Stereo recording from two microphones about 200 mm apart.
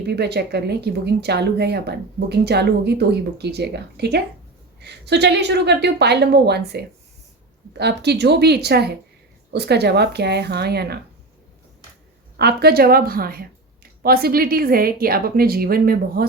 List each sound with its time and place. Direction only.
0.1 s speech: 55° right (ahead or behind)
12.4 s a woman's voice: 55° right (ahead or behind)